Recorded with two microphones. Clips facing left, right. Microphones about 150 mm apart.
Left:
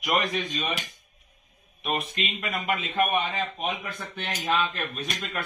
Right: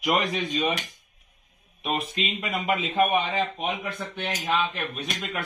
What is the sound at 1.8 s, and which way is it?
Speech, 25° right (ahead or behind).